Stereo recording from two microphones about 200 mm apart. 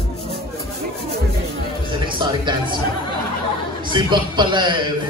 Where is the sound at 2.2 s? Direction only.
20° right (ahead or behind).